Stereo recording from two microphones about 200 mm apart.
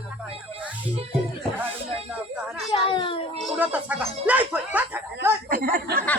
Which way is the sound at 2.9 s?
25° left (ahead or behind).